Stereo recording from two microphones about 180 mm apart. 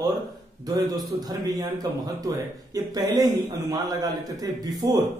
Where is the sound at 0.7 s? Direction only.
20° right (ahead or behind).